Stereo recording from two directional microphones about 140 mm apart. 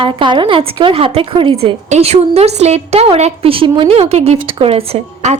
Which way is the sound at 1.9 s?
50° right (ahead or behind).